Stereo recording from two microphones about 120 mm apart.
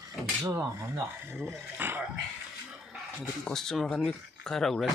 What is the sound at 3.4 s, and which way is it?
Speech, 5° left (ahead or behind).